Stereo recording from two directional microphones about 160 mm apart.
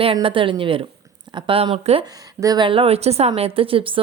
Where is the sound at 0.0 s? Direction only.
35° right (ahead or behind).